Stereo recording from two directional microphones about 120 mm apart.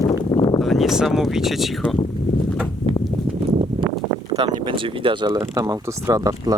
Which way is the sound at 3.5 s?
50° right (ahead or behind).